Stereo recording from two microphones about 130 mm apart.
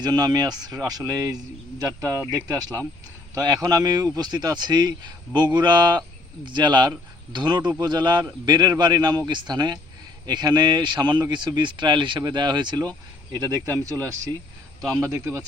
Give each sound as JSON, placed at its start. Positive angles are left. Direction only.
{"t": 0.0, "sound": "speech", "side_deg": -30}